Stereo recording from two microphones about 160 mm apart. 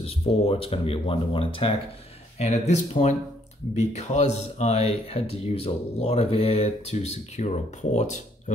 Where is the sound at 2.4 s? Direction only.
45° left (ahead or behind).